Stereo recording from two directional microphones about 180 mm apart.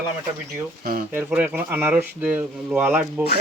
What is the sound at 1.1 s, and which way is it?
Speech, 10° right (ahead or behind).